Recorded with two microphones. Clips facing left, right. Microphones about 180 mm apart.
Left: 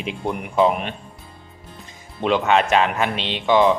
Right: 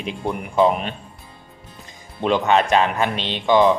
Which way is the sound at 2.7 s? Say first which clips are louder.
Even; 35° right (ahead or behind).